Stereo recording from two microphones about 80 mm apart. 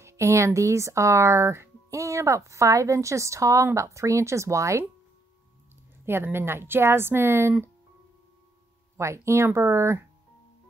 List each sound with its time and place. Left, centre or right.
0.0 s speech: right
6.0 s speech: right
8.9 s speech: right